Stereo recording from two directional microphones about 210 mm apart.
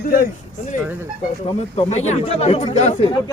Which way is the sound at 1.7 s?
30° left (ahead or behind).